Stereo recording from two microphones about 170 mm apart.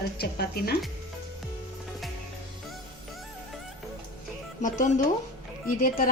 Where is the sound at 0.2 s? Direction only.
65° left (ahead or behind).